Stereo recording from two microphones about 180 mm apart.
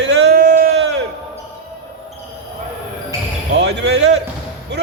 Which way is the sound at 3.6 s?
75° right (ahead or behind).